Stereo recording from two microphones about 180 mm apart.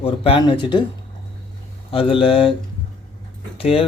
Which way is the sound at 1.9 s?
30° left (ahead or behind).